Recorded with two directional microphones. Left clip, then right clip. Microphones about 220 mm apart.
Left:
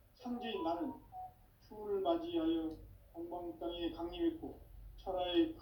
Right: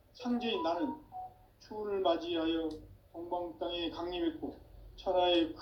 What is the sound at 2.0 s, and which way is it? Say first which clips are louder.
Speech: right 4 dB; 50° right (ahead or behind).